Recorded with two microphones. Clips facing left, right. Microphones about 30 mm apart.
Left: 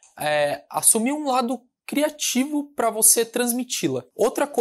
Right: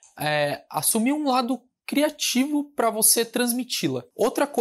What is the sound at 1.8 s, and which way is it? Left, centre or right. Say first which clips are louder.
Speech: even; right.